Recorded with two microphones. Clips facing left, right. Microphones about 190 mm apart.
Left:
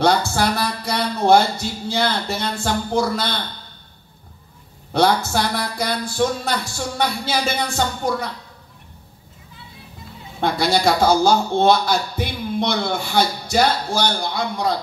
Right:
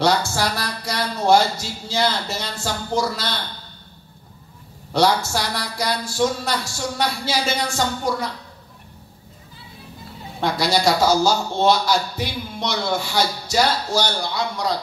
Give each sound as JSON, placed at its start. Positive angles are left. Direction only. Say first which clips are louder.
{"t": 0.0, "sound": "a man's voice", "louder": "left 2 dB", "side_deg": 55}
{"t": 4.9, "sound": "a man's voice", "louder": "left 1 dB", "side_deg": 55}
{"t": 10.4, "sound": "a man's voice", "louder": "left 1 dB", "side_deg": 55}